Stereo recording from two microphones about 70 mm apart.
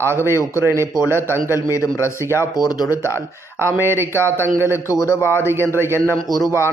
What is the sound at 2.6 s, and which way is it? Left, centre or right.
Speech, left.